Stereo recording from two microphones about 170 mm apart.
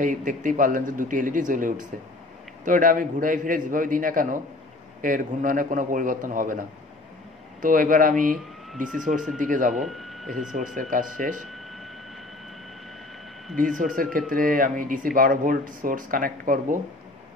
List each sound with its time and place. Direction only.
0.0 s speech: 50° right (ahead or behind)
7.6 s speech: 50° right (ahead or behind)
9.8 s speech: centre (ahead or behind)
10.5 s speech: 50° right (ahead or behind)
11.4 s a sound: centre (ahead or behind)
13.6 s speech: 50° right (ahead or behind)